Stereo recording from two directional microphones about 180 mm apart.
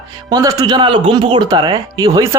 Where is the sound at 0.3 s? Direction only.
20° right (ahead or behind).